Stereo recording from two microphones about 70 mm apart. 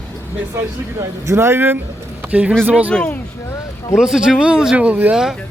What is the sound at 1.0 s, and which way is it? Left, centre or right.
Speech, right.